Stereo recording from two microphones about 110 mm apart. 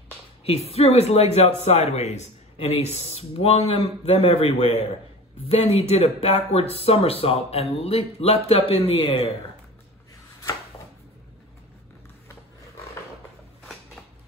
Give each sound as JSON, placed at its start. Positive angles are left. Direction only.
{"t": 0.5, "sound": "speech", "side_deg": 65}
{"t": 2.5, "sound": "speech", "side_deg": 70}